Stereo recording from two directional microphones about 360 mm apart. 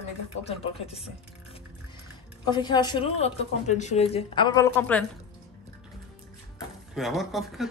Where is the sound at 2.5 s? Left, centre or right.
Centre.